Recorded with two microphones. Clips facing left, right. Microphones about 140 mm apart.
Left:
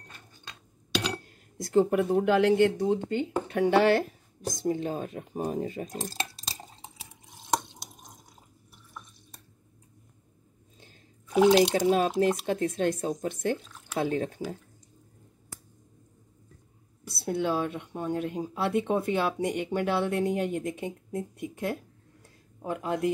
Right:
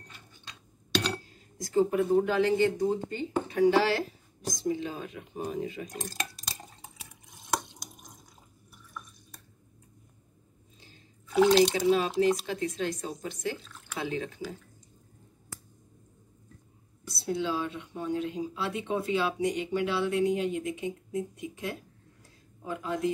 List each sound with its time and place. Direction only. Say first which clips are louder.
1.2 s speech: left 2 dB; 60° left (ahead or behind); by 5.9 s 45° left (ahead or behind)
5.9 s dishes: left 3 dB; 30° left (ahead or behind)
11.2 s speech: left 2 dB; 15° left (ahead or behind)
11.7 s speech: left 2 dB; 45° left (ahead or behind)
17.1 s speech: left 3 dB; 60° left (ahead or behind)